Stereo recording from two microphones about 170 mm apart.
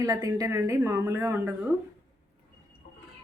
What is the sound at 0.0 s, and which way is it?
A woman's voice, 20° right (ahead or behind).